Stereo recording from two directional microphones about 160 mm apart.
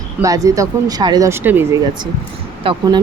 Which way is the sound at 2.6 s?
35° right (ahead or behind).